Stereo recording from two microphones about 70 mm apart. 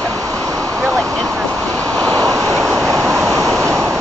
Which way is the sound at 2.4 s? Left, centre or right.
Centre.